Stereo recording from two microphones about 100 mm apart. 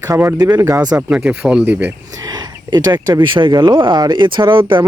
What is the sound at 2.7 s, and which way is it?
Speech, 45° right (ahead or behind).